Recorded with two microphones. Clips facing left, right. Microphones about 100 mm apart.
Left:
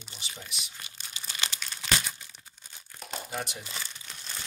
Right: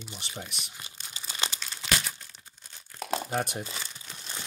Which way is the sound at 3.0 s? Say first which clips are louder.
Right 7 dB; 65° right (ahead or behind).